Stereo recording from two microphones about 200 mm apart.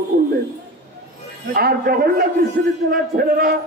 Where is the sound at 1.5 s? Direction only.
50° right (ahead or behind).